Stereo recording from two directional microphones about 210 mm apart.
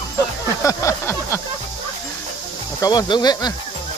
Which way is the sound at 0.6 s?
15° left (ahead or behind).